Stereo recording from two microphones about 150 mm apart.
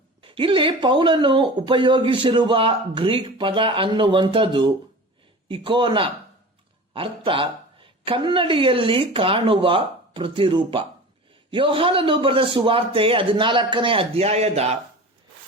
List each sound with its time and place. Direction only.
0.2 s speech: 35° right (ahead or behind)